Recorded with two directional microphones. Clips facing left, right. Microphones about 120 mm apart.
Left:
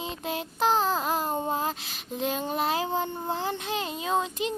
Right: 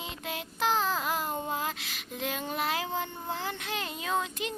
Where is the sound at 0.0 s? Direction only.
30° left (ahead or behind).